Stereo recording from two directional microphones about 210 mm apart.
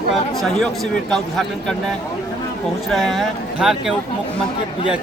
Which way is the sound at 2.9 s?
Centre (ahead or behind).